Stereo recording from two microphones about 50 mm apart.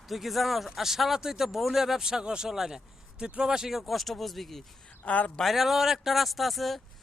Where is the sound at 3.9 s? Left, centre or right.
Centre.